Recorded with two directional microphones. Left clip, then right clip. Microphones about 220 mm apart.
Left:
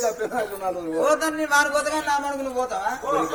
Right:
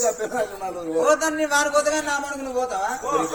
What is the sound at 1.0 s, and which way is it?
A man's voice, centre (ahead or behind).